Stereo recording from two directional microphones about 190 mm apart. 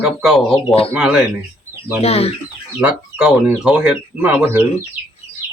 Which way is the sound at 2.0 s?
35° left (ahead or behind).